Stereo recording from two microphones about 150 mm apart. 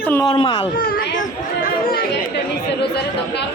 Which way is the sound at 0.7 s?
70° left (ahead or behind).